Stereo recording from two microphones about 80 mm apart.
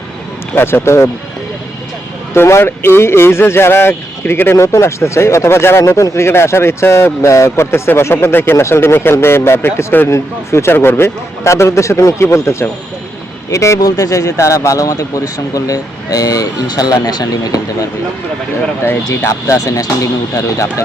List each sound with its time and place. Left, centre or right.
0.5 s speech: left
2.3 s speech: left
19.3 s speech: left